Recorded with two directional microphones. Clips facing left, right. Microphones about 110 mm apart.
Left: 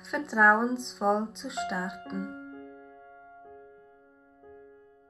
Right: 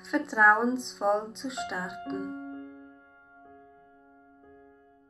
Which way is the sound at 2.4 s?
25° right (ahead or behind).